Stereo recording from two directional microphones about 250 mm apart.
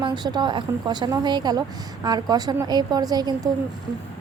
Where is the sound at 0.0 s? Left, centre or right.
Centre.